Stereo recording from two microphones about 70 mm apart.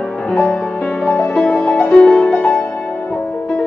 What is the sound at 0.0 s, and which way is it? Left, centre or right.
Music, centre.